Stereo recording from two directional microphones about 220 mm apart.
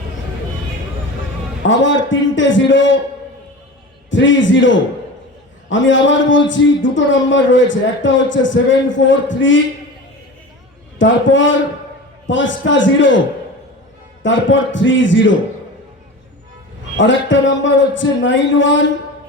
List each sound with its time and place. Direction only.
1.6 s a man's voice: 60° left (ahead or behind)
4.1 s a man's voice: 60° left (ahead or behind)
10.9 s a man's voice: 60° left (ahead or behind)
14.2 s a man's voice: 60° left (ahead or behind)
17.0 s a man's voice: 60° left (ahead or behind)